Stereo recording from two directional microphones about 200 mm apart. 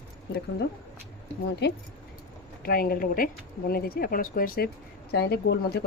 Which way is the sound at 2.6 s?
50° left (ahead or behind).